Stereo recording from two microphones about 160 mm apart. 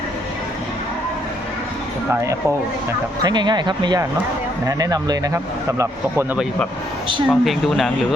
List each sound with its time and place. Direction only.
3.2 s speech: 25° right (ahead or behind)
7.3 s speech: centre (ahead or behind)